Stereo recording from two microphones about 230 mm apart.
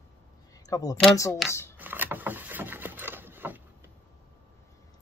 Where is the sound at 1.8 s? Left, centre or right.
Centre.